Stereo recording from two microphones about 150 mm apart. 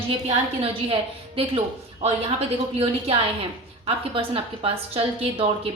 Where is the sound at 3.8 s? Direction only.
40° right (ahead or behind).